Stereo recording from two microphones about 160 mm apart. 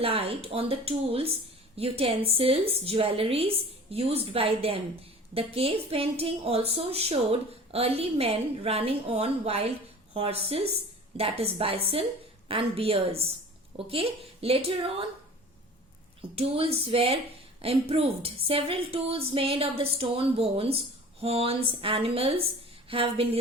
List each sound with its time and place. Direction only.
0.0 s speech: 35° right (ahead or behind)
16.3 s speech: 40° right (ahead or behind)